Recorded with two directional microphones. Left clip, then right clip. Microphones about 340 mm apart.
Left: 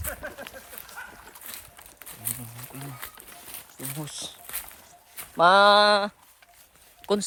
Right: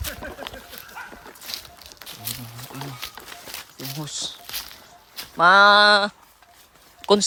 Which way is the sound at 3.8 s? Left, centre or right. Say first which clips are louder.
Right 2 dB; centre.